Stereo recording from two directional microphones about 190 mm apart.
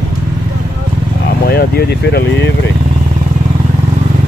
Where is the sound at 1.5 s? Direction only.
55° left (ahead or behind).